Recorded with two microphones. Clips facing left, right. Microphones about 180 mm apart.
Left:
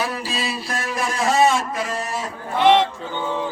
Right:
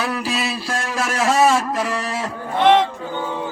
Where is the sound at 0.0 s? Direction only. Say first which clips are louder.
Right 3 dB; 70° right (ahead or behind).